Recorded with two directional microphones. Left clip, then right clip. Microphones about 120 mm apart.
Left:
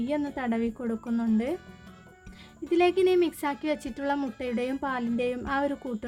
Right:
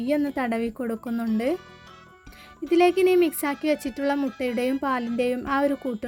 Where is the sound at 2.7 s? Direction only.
25° right (ahead or behind).